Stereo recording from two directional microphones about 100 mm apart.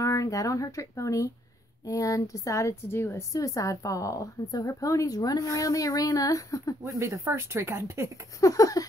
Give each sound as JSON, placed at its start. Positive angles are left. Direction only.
{"t": 0.0, "sound": "a woman's voice", "side_deg": 35}
{"t": 6.8, "sound": "speech", "side_deg": -30}
{"t": 8.4, "sound": "a woman's voice", "side_deg": 35}